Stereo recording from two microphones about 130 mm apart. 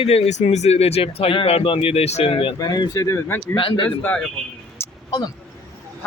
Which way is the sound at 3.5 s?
40° left (ahead or behind).